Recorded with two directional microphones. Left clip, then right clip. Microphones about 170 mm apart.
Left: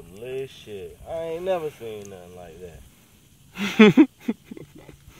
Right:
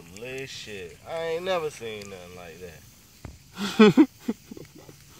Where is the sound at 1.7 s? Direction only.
15° left (ahead or behind).